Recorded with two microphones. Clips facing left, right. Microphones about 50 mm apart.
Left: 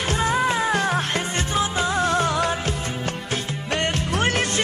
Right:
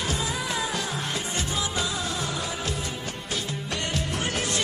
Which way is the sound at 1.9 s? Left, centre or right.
Left.